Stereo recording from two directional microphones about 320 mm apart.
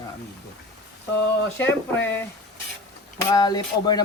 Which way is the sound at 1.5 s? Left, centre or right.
Centre.